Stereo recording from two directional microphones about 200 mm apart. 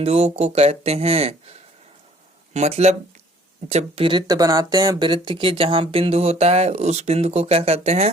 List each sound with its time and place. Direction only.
0.0 s speech: 30° right (ahead or behind)